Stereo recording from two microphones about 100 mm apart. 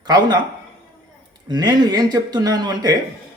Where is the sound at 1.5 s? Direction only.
40° right (ahead or behind).